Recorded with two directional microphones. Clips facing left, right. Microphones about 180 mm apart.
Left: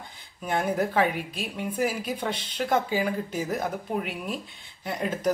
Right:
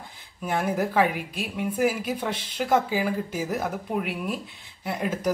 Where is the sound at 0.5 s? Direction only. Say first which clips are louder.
Even; 5° right (ahead or behind).